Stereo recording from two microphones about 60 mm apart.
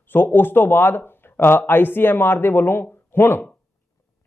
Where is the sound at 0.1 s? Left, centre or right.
Left.